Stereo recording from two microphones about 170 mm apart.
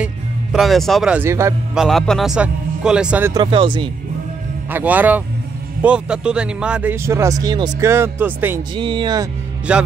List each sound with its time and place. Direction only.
0.0 s speech: centre (ahead or behind)
1.8 s a man's voice: centre (ahead or behind)
3.3 s speech: 30° right (ahead or behind)
4.6 s speech: 10° right (ahead or behind)
8.7 s speech: 30° right (ahead or behind)
9.7 s speech: 5° right (ahead or behind)